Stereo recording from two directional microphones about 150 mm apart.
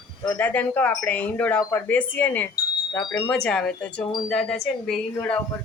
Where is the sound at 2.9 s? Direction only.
20° left (ahead or behind).